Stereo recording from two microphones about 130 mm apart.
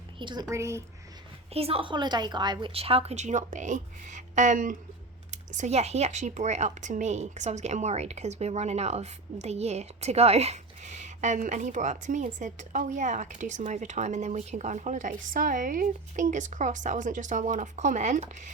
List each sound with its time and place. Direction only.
0.2 s a woman's voice: 35° right (ahead or behind)
1.5 s a woman's voice: 45° right (ahead or behind); by 4.8 s 90° right
5.3 s speech: 65° right (ahead or behind)